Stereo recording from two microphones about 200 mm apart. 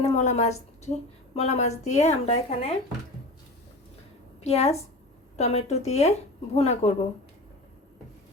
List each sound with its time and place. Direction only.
0.0 s a woman's voice: 35° left (ahead or behind)
4.4 s a woman's voice: 30° left (ahead or behind)